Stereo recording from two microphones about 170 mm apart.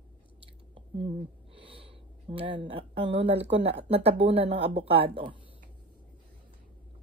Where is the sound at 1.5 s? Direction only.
30° right (ahead or behind).